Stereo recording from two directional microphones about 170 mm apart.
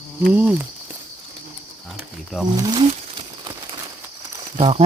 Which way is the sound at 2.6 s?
25° right (ahead or behind).